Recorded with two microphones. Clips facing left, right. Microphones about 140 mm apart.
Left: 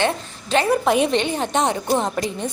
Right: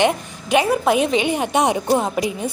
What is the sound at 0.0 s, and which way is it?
Speech, 15° right (ahead or behind).